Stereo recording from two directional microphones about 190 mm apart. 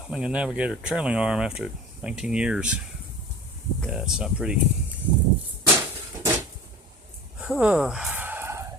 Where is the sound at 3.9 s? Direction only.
5° right (ahead or behind).